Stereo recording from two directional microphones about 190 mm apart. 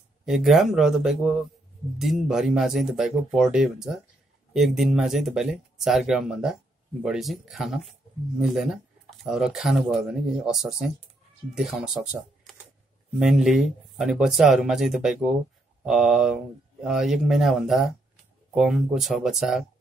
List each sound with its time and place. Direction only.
0.2 s speech: centre (ahead or behind)